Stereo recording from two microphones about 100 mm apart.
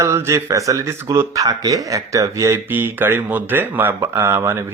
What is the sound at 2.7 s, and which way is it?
Speech, 20° right (ahead or behind).